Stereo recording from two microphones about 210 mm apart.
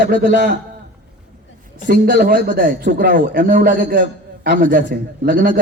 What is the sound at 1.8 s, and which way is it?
Speech, 45° right (ahead or behind).